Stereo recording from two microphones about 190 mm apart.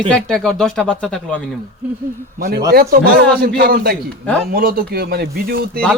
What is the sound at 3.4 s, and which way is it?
A man's voice, 55° right (ahead or behind).